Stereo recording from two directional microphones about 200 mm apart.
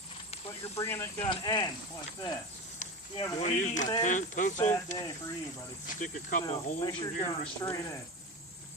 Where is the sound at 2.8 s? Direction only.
35° left (ahead or behind).